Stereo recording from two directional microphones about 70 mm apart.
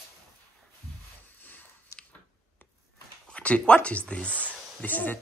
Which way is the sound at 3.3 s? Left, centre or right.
Centre.